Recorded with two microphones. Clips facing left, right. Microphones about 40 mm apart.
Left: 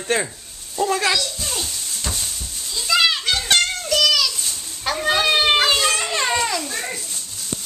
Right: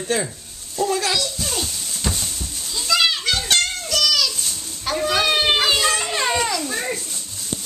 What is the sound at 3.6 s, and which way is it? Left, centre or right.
Music, centre.